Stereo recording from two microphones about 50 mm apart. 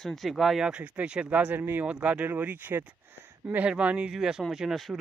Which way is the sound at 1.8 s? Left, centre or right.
Right.